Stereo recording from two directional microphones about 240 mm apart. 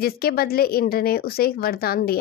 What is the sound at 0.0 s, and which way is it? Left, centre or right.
Speech, left.